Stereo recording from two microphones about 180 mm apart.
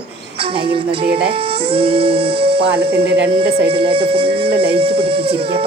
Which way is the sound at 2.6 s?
65° right (ahead or behind).